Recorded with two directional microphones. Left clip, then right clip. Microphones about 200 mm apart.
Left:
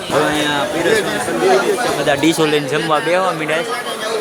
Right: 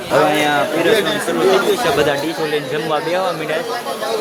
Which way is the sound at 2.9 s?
10° left (ahead or behind).